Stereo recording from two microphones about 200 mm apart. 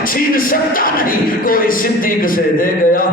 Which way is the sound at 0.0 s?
45° left (ahead or behind).